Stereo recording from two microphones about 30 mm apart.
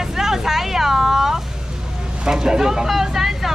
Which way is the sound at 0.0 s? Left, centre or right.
Centre.